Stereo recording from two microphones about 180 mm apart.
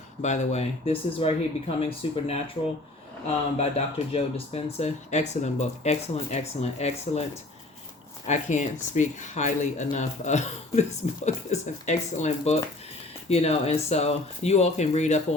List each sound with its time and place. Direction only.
0.2 s speech: 40° left (ahead or behind)
3.6 s speech: 35° left (ahead or behind)
8.3 s speech: 40° left (ahead or behind)